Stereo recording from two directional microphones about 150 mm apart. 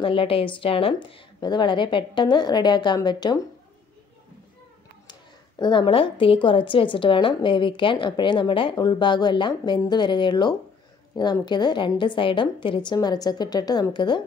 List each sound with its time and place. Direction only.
0.0 s a woman's voice: 35° left (ahead or behind)
5.6 s a woman's voice: 30° left (ahead or behind)